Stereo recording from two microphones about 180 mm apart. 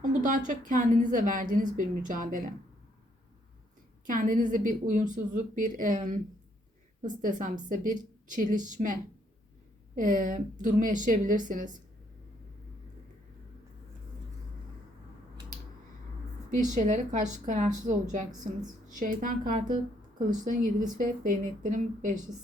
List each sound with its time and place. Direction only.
0.0 s a woman's voice: 45° right (ahead or behind)
4.0 s a woman's voice: 50° right (ahead or behind)
16.5 s a woman's voice: 45° right (ahead or behind)